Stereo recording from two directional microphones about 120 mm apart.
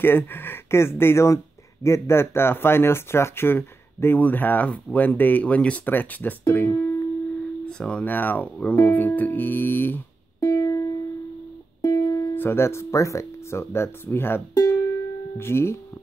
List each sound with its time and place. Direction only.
0.0 s speech: 15° left (ahead or behind)
10.5 s music: 30° left (ahead or behind)
12.4 s speech: 20° left (ahead or behind)